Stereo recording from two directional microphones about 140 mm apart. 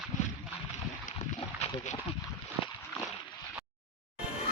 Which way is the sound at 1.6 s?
50° left (ahead or behind).